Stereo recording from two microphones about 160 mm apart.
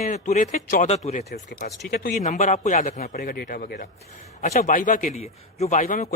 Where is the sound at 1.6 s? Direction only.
75° left (ahead or behind).